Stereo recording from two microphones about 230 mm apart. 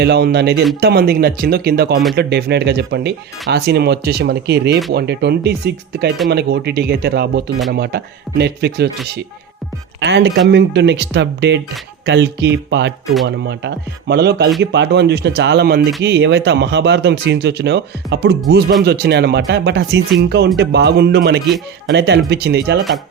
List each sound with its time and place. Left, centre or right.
0.0 s speech: right
10.0 s speech: right